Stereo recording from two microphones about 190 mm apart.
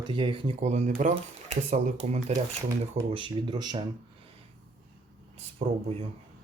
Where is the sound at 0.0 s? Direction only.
25° right (ahead or behind).